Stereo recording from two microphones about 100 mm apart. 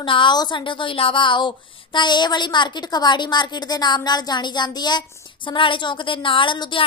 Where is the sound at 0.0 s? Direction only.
55° left (ahead or behind).